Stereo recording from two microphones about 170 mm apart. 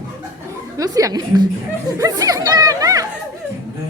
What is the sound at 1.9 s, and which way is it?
Chatter, 20° right (ahead or behind).